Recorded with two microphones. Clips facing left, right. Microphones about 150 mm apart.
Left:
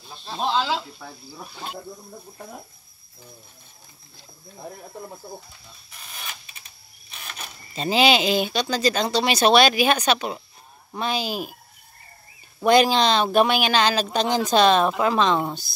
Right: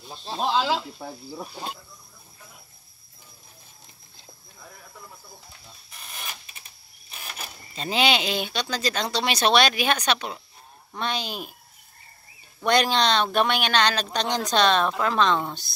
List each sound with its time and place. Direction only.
0.4 s speech: 5° right (ahead or behind)
1.8 s speech: 55° left (ahead or behind)
4.6 s speech: 40° left (ahead or behind)
7.1 s speech: 10° right (ahead or behind)
12.6 s speech: 5° left (ahead or behind)